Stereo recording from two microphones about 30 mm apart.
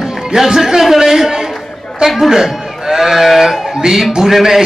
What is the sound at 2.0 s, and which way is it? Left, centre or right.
Speech, centre.